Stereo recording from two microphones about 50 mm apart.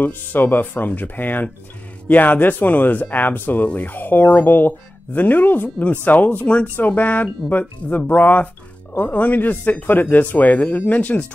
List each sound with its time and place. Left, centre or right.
0.0 s speech: left